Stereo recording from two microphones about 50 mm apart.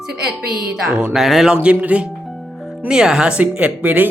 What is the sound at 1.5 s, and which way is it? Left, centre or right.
Speech, right.